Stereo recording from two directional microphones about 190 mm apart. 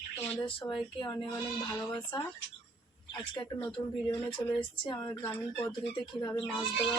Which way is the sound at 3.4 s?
20° left (ahead or behind).